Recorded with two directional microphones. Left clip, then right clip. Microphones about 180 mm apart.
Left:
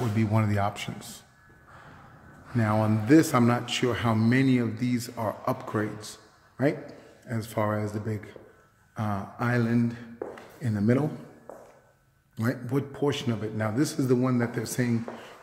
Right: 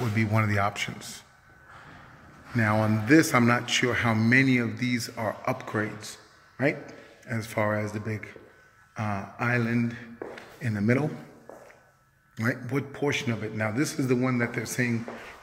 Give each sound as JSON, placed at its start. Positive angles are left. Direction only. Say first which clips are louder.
{"t": 0.0, "sound": "a man's voice", "louder": "right 1 dB", "side_deg": 10}
{"t": 2.5, "sound": "a man's voice", "louder": "right 1 dB", "side_deg": 10}
{"t": 8.9, "sound": "a sound", "louder": "even", "side_deg": 15}
{"t": 10.6, "sound": "a man's voice", "louder": "even", "side_deg": 15}
{"t": 12.4, "sound": "a man's voice", "louder": "right 1 dB", "side_deg": 15}